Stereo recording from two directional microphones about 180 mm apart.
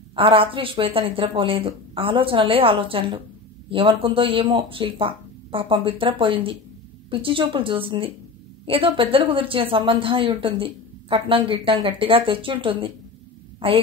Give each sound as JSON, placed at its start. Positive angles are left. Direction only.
{"t": 0.1, "sound": "a woman's voice", "side_deg": -30}